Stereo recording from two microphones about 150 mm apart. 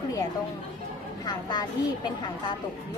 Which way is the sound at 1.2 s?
30° left (ahead or behind).